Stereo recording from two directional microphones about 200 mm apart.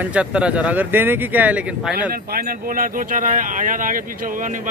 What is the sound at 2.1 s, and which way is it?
Speech, 50° right (ahead or behind).